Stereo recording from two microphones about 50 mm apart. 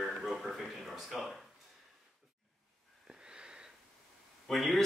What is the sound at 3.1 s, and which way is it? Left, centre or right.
Wheeze, centre.